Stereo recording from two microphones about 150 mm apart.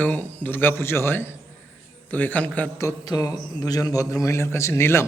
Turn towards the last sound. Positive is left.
turn(degrees=15)  # may be behind; listen again after turning